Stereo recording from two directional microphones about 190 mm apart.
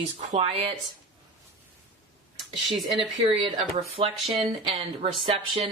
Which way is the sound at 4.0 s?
25° right (ahead or behind).